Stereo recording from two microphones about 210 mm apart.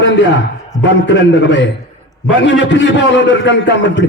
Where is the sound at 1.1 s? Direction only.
55° left (ahead or behind).